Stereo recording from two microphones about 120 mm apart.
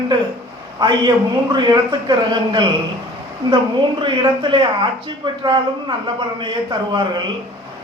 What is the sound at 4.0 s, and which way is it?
Speech, 45° right (ahead or behind).